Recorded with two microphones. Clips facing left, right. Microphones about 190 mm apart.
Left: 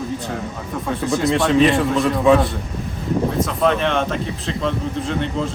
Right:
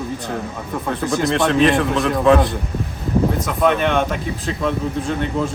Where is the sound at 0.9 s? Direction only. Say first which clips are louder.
Left 1 dB; centre (ahead or behind).